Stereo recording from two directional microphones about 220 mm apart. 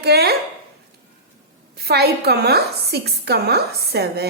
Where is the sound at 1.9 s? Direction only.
45° right (ahead or behind).